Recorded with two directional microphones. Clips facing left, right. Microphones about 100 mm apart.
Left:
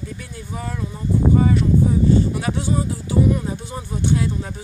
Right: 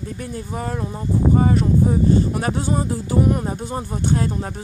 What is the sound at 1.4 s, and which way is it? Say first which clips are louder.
Speech: even; 35° right (ahead or behind).